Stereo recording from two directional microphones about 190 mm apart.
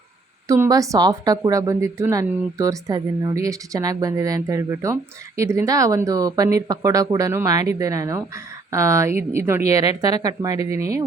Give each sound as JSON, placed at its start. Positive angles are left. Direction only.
{"t": 0.4, "sound": "a woman's voice", "side_deg": -15}